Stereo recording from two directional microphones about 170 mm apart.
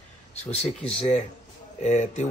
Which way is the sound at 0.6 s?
40° left (ahead or behind).